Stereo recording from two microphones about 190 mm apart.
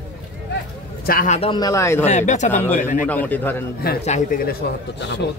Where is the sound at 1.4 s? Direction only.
25° left (ahead or behind).